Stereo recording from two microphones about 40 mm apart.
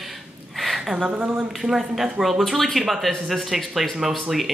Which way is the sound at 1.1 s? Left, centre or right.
Right.